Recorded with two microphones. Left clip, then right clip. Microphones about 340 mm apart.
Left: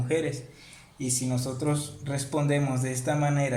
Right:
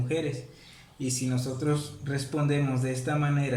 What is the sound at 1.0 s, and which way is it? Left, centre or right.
Speech, centre.